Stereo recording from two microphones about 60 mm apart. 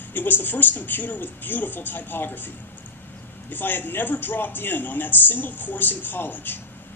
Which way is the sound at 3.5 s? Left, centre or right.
Left.